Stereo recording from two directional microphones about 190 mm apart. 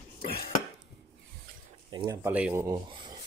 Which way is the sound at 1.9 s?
25° right (ahead or behind).